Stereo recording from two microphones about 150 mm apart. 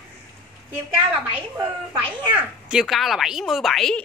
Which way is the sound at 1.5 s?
15° right (ahead or behind).